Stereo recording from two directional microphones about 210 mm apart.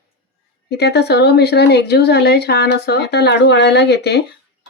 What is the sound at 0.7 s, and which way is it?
A woman's voice, 50° left (ahead or behind).